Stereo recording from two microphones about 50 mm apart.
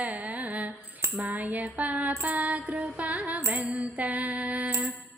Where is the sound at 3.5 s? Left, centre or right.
Right.